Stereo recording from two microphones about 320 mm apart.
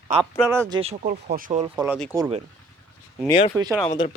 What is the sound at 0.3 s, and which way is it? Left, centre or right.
Speech, centre.